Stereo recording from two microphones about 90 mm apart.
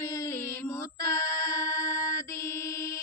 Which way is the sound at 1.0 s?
35° left (ahead or behind).